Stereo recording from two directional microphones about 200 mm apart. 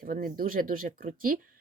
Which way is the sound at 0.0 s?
45° right (ahead or behind).